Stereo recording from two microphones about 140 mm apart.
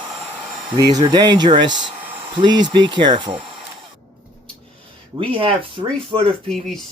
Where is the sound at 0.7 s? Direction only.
30° right (ahead or behind).